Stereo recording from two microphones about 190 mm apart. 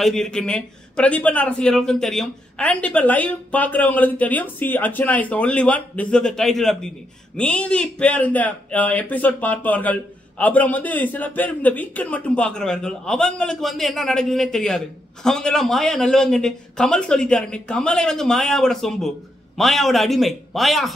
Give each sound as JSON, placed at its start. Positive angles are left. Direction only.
{"t": 0.0, "sound": "a man's voice", "side_deg": 5}